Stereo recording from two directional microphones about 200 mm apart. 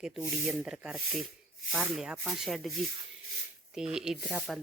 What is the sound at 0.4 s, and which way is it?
Speech, 5° right (ahead or behind).